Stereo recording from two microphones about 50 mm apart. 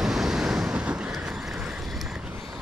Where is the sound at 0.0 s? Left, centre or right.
Centre.